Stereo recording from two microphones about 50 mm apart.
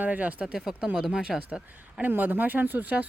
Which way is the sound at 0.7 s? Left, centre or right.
Right.